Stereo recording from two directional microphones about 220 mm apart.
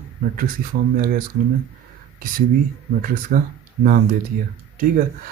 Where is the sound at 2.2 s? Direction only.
40° right (ahead or behind).